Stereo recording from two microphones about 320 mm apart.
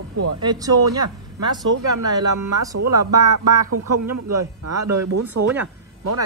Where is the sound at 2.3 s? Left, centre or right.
Right.